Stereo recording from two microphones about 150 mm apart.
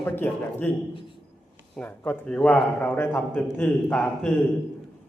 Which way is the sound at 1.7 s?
10° left (ahead or behind).